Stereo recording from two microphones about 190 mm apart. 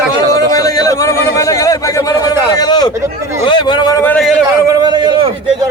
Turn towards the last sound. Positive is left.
turn(degrees=-25)  # may be behind; listen again after turning